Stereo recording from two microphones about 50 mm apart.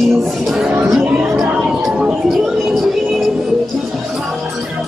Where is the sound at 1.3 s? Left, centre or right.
Centre.